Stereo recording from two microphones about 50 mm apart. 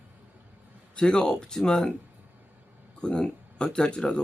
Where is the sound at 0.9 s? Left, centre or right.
Centre.